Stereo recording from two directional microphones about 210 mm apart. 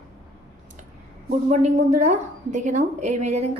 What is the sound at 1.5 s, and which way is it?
A woman's voice, 30° right (ahead or behind).